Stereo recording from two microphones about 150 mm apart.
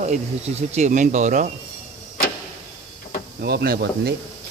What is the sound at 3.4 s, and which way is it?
Speech, 90° right.